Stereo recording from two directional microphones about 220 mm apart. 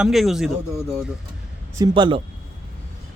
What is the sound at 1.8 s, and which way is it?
Speech, 20° right (ahead or behind).